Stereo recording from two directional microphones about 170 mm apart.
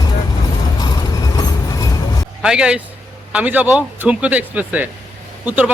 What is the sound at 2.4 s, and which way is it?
A man's voice, 5° right (ahead or behind).